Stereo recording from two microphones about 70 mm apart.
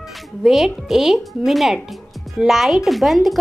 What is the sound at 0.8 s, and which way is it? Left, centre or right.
Speech, centre.